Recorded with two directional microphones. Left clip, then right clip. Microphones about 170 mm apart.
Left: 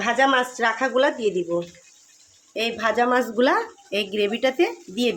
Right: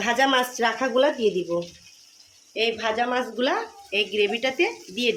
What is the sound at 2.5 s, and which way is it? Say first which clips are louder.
Speech: left 1 dB; 45° left (ahead or behind).